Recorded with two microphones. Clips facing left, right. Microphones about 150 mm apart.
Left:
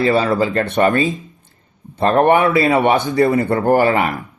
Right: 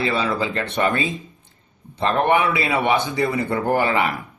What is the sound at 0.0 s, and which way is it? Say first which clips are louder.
A man's voice: left 7 dB; 45° left (ahead or behind).